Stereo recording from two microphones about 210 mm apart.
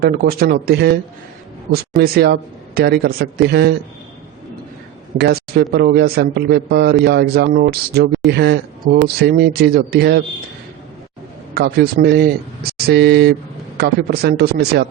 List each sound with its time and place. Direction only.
0.0 s a man's voice: 45° right (ahead or behind)
2.0 s a man's voice: 50° right (ahead or behind)
5.1 s a man's voice: 50° right (ahead or behind)
11.5 s a man's voice: 45° right (ahead or behind)